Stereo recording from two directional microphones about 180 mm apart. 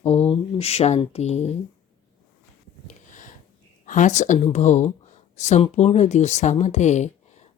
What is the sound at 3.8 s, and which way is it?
Speech, 45° left (ahead or behind).